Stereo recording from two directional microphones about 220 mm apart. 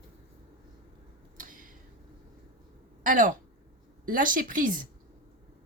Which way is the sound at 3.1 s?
35° right (ahead or behind).